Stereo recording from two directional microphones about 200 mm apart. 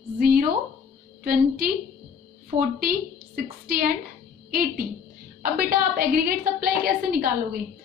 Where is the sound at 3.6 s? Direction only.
50° right (ahead or behind).